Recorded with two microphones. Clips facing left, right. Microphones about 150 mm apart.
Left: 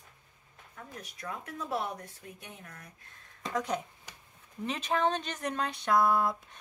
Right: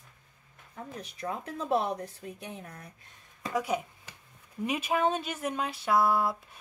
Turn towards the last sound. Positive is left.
turn(degrees=-5)  # may be behind; listen again after turning